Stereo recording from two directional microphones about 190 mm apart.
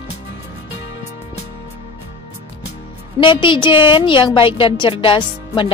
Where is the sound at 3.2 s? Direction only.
25° left (ahead or behind).